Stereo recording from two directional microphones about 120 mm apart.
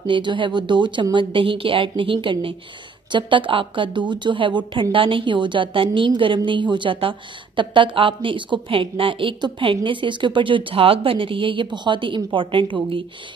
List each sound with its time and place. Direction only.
0.0 s a woman's voice: 45° right (ahead or behind)